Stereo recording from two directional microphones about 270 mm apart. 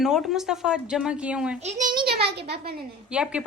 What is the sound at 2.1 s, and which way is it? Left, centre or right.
Speech, right.